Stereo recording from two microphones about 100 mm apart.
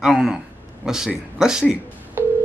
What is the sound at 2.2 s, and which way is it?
Telephone dialing, 25° right (ahead or behind).